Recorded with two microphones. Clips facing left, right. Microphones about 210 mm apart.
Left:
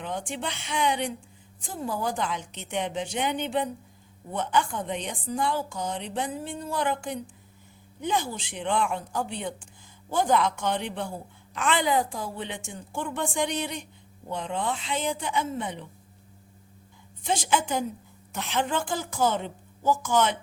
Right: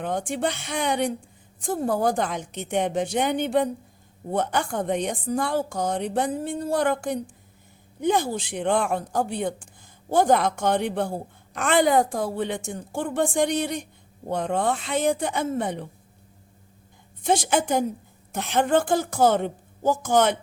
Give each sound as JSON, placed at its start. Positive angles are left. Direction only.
{"t": 0.0, "sound": "a woman's voice", "side_deg": -50}
{"t": 1.7, "sound": "a woman's voice", "side_deg": -55}
{"t": 2.0, "sound": "a woman's voice", "side_deg": -45}
{"t": 5.7, "sound": "a woman's voice", "side_deg": -45}
{"t": 6.7, "sound": "a woman's voice", "side_deg": -50}
{"t": 8.0, "sound": "a woman's voice", "side_deg": -45}
{"t": 17.2, "sound": "a woman's voice", "side_deg": -45}